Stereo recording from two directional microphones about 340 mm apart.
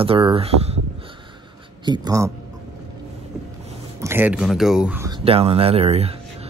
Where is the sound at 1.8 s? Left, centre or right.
Centre.